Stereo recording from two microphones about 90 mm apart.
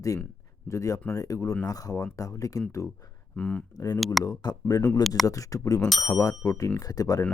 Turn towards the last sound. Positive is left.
turn(degrees=40)  # may be behind; listen again after turning